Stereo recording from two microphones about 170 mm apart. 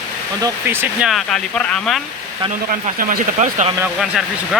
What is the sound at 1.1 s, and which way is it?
Speech, centre (ahead or behind).